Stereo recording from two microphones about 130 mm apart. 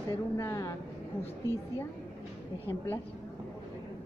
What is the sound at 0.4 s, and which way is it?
Speech, 20° left (ahead or behind).